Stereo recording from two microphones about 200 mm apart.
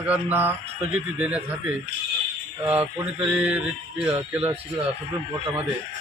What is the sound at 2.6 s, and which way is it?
Speech, 10° right (ahead or behind).